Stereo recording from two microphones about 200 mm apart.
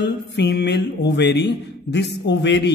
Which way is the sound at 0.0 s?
60° left (ahead or behind).